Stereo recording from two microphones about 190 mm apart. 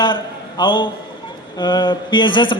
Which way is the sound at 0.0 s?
25° left (ahead or behind).